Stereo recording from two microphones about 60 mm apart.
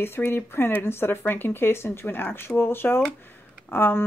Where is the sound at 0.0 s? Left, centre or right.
Left.